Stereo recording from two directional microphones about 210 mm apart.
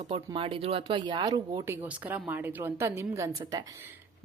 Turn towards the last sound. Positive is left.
turn(degrees=-15)  # may be behind; listen again after turning